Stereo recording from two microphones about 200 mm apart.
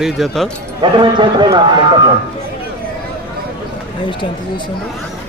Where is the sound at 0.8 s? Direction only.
25° right (ahead or behind).